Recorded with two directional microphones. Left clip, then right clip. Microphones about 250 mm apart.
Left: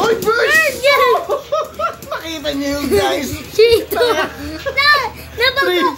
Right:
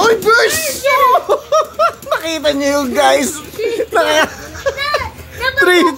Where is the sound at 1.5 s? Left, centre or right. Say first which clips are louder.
Right 6 dB; right.